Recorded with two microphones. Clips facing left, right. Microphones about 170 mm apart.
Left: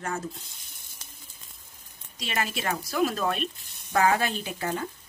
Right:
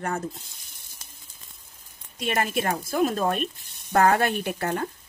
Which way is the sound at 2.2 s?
55° right (ahead or behind).